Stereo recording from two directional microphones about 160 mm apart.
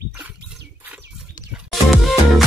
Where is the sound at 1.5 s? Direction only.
Centre (ahead or behind).